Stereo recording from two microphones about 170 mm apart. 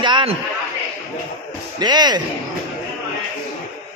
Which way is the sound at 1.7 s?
25° right (ahead or behind).